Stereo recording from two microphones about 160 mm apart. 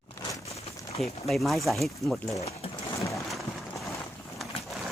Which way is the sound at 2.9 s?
20° left (ahead or behind).